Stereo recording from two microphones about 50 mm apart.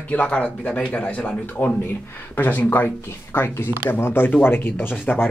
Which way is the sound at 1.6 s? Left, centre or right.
Left.